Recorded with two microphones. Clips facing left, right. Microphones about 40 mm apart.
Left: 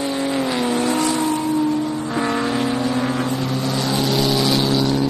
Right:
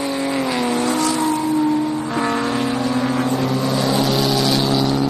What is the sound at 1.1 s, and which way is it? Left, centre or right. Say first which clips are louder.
Vehicle: right 1 dB; right.